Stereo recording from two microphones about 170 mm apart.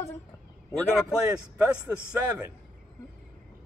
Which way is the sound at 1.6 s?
15° right (ahead or behind).